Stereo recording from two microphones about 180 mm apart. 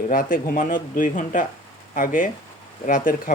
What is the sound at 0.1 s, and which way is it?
Speech, 50° left (ahead or behind).